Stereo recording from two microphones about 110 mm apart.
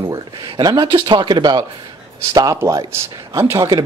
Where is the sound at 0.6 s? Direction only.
40° right (ahead or behind).